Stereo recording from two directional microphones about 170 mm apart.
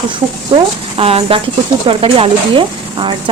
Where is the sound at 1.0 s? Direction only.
35° right (ahead or behind).